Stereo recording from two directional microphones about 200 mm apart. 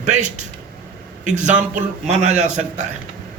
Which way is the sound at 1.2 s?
40° right (ahead or behind).